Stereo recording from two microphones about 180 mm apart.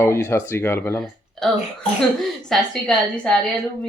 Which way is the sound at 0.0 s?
15° left (ahead or behind).